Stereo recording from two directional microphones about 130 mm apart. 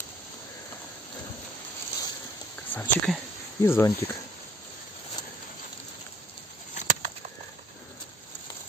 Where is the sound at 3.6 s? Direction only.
20° left (ahead or behind).